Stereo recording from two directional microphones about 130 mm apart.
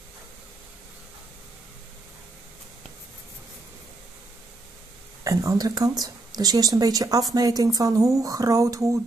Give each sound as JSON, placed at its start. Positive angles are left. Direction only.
{"t": 5.2, "sound": "speech", "side_deg": -25}